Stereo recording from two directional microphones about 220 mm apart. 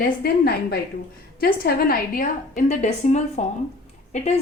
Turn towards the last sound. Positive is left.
turn(degrees=30)  # may be behind; listen again after turning